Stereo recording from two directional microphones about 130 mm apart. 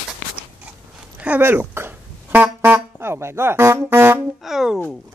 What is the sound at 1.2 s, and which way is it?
Music, 15° right (ahead or behind).